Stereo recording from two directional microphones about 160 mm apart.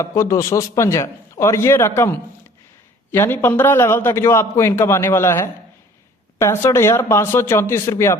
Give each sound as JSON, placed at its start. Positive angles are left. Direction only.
{"t": 0.0, "sound": "a man's voice", "side_deg": 20}